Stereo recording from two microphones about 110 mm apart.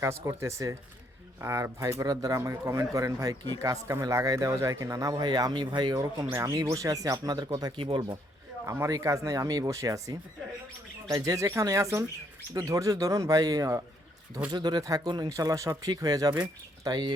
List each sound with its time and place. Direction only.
0.0 s speech: 25° right (ahead or behind); by 6.0 s 45° right (ahead or behind)
6.3 s speech: 30° right (ahead or behind)
8.6 s speech: 25° right (ahead or behind); by 17.2 s 40° right (ahead or behind)